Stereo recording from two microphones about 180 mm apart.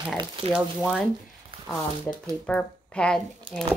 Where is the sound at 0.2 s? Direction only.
25° right (ahead or behind).